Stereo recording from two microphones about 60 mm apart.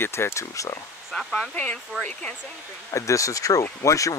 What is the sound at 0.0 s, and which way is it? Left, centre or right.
Speech, left.